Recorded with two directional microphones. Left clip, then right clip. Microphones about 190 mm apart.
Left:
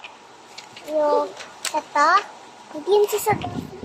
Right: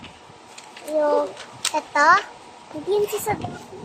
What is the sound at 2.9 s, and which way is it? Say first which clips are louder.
Speech: left 4 dB; 10° left (ahead or behind).